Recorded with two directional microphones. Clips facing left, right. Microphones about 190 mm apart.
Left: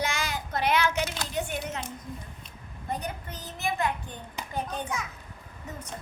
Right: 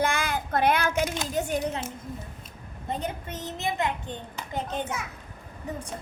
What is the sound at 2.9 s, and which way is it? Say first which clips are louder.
A child's voice: right 2 dB; 25° right (ahead or behind).